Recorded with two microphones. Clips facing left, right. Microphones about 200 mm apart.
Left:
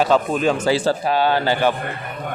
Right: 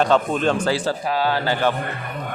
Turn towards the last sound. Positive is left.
turn(degrees=25)  # may be behind; listen again after turning